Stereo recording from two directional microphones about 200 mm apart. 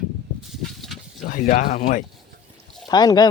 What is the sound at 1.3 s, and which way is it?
Speech, 45° left (ahead or behind).